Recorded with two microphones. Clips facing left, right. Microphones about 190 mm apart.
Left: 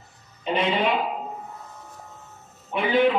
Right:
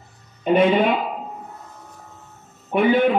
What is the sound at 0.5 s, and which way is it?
Speech, 50° right (ahead or behind).